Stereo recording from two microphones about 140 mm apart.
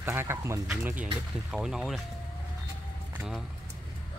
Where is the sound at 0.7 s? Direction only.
10° right (ahead or behind).